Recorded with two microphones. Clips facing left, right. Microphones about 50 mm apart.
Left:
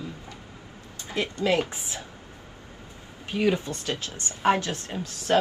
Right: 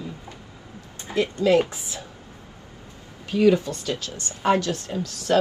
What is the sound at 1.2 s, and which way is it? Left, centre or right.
Speech, left.